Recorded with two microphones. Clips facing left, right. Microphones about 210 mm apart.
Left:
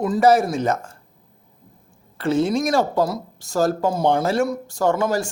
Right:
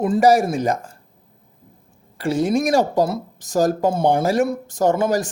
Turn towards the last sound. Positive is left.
turn(degrees=-20)  # may be behind; listen again after turning